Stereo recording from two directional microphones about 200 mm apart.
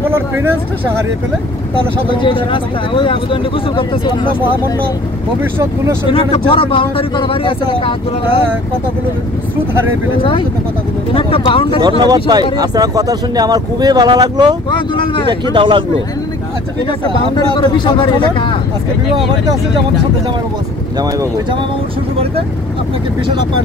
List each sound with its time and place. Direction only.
0.1 s speech: 10° right (ahead or behind)
2.2 s speech: 25° left (ahead or behind)
5.4 s speech: 15° right (ahead or behind)
6.0 s speech: 25° left (ahead or behind)
11.1 s speech: 25° left (ahead or behind)
12.0 s speech: 20° right (ahead or behind)
14.7 s speech: 25° left (ahead or behind)
15.5 s speech: 25° right (ahead or behind)
17.6 s speech: 20° left (ahead or behind)
21.0 s speech: 20° right (ahead or behind)